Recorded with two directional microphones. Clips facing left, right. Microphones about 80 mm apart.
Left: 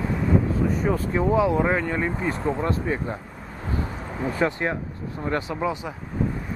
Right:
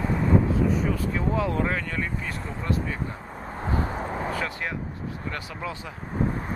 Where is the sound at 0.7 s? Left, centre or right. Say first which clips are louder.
Left 3 dB; left.